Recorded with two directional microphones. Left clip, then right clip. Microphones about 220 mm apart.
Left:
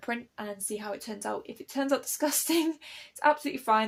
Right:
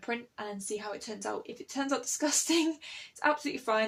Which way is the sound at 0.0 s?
40° left (ahead or behind).